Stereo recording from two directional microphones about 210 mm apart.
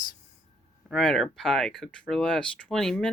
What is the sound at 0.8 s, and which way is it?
Speech, centre (ahead or behind).